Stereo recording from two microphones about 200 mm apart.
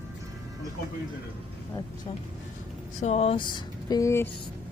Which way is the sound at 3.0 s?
30° left (ahead or behind).